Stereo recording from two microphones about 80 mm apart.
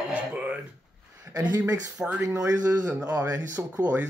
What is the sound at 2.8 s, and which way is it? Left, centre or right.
Speech, right.